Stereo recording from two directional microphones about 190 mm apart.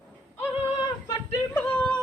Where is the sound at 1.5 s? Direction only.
5° left (ahead or behind).